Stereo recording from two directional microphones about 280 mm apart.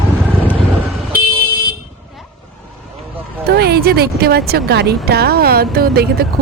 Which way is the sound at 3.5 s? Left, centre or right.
Right.